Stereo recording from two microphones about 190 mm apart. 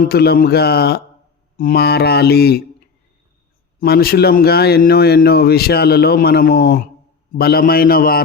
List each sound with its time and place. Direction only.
0.0 s a man's voice: 55° left (ahead or behind)
3.8 s a man's voice: 55° left (ahead or behind)